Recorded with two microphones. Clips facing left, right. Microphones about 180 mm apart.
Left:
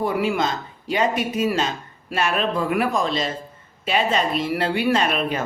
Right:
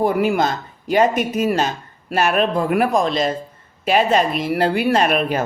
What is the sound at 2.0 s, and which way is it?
Speech, 50° right (ahead or behind).